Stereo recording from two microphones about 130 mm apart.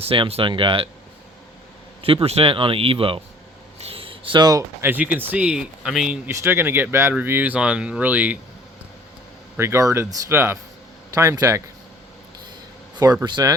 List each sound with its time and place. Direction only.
0.0 s speech: 50° right (ahead or behind)
2.2 s speech: 50° right (ahead or behind)
3.8 s a sound: 50° right (ahead or behind); by 4.6 s 35° right (ahead or behind)
4.8 s speech: 15° right (ahead or behind)
6.2 s speech: 15° right (ahead or behind)
9.6 s speech: 20° right (ahead or behind)
13.2 s speech: 30° right (ahead or behind)